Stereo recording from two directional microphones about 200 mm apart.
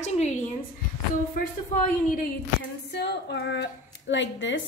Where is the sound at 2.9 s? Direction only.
55° left (ahead or behind).